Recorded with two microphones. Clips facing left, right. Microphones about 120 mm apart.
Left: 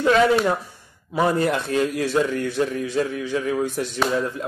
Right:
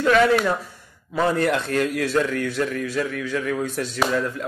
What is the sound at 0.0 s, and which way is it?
A man's voice, 25° left (ahead or behind).